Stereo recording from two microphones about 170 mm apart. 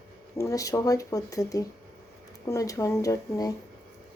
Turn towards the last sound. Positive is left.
turn(degrees=20)  # may be behind; listen again after turning